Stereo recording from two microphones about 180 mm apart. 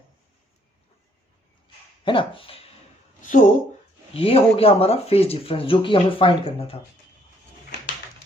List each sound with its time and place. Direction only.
2.0 s speech: 30° left (ahead or behind)
3.2 s speech: 45° left (ahead or behind)
4.1 s speech: 30° left (ahead or behind)